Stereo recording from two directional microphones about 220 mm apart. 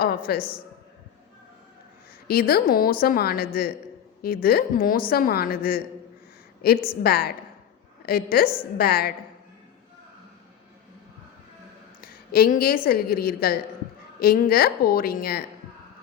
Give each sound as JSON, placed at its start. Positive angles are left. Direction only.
{"t": 0.3, "sound": "a woman's voice", "side_deg": 45}
{"t": 2.2, "sound": "a woman's voice", "side_deg": 45}
{"t": 6.8, "sound": "a woman's voice", "side_deg": 45}
{"t": 12.0, "sound": "a woman's voice", "side_deg": 40}